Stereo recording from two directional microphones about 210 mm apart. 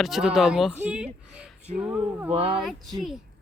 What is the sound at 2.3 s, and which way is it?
Speech, 25° right (ahead or behind).